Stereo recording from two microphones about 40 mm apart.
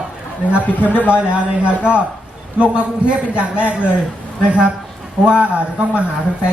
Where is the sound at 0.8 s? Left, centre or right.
Left.